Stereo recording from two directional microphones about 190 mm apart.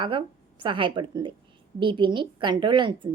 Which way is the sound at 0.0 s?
25° right (ahead or behind).